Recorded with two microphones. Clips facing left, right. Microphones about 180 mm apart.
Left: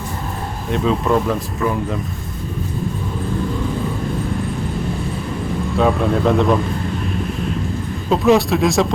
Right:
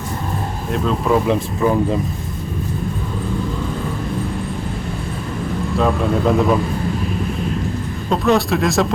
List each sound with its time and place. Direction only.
0.7 s speech: centre (ahead or behind)
1.3 s speech: 25° right (ahead or behind)
5.7 s speech: centre (ahead or behind)
8.1 s speech: centre (ahead or behind)